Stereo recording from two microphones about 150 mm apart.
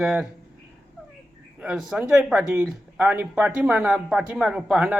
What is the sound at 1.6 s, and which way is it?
Speech, 5° right (ahead or behind).